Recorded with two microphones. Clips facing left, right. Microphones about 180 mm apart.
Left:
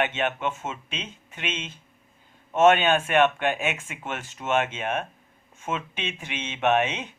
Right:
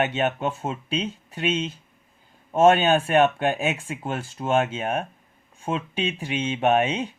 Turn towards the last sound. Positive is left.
turn(degrees=-35)  # may be behind; listen again after turning